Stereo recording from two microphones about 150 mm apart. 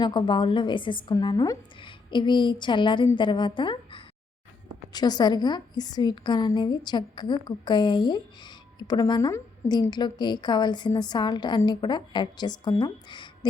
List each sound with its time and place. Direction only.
0.0 s a woman's voice: 30° left (ahead or behind)